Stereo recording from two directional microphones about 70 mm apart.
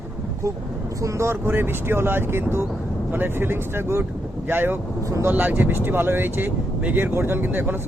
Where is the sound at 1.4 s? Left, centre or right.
Right.